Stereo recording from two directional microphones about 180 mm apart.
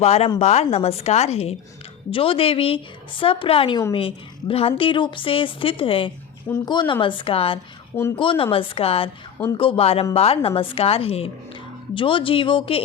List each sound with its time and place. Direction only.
0.0 s a woman's voice: 35° left (ahead or behind)